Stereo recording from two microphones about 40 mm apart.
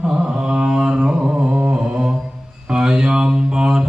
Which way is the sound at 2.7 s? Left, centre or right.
Centre.